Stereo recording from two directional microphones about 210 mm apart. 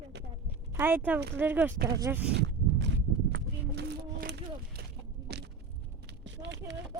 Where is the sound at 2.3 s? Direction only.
55° right (ahead or behind).